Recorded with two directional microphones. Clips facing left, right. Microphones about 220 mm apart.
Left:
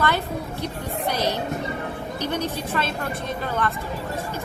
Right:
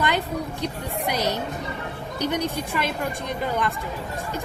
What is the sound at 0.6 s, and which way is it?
Speech, 15° right (ahead or behind).